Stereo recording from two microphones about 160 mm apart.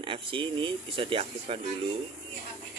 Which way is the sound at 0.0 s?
35° right (ahead or behind).